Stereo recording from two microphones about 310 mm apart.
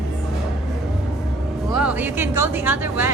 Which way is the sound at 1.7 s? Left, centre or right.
Centre.